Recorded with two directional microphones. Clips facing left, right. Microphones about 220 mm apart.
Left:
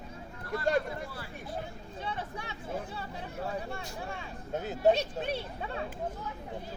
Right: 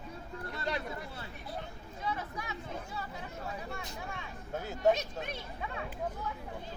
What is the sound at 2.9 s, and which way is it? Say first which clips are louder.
Hubbub: left 3 dB; 30° left (ahead or behind).